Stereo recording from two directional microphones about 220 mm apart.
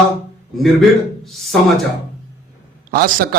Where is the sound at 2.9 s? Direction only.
40° right (ahead or behind).